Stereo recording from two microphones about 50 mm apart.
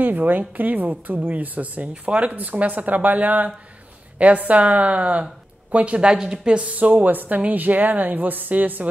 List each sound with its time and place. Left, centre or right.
0.0 s a woman's voice: right